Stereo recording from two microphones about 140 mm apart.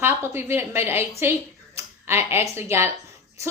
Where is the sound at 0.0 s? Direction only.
15° right (ahead or behind).